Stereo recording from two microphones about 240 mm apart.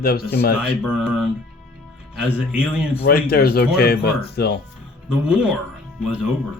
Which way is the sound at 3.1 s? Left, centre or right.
Left.